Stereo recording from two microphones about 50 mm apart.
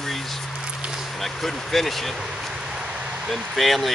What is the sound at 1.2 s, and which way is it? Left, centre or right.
Speech, centre.